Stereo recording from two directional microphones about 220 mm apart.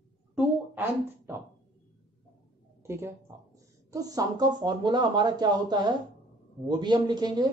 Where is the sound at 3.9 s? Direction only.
15° right (ahead or behind).